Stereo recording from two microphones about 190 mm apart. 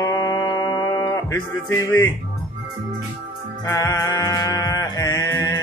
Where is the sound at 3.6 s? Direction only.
15° left (ahead or behind).